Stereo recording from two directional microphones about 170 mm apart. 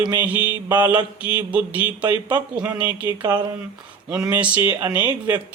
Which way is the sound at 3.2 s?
20° right (ahead or behind).